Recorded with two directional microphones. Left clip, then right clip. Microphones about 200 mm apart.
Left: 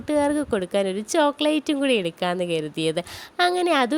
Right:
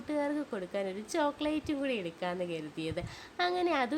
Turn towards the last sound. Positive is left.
turn(degrees=40)  # may be behind; listen again after turning